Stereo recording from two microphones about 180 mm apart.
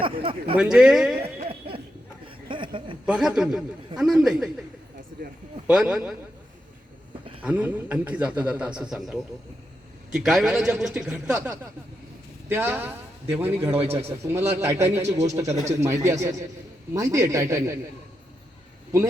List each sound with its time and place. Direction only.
0.0 s a sound: 30° right (ahead or behind)
0.5 s a man's voice: 5° right (ahead or behind)
1.2 s a sound: 30° right (ahead or behind)
3.1 s a man's voice: 5° right (ahead or behind)
5.6 s a man's voice: 5° right (ahead or behind)
7.4 s a man's voice: 10° right (ahead or behind)